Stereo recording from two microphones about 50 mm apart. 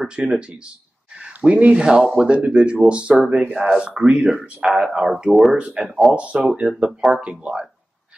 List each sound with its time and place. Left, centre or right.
0.0 s speech: centre
4.6 s speech: centre
5.6 s speech: centre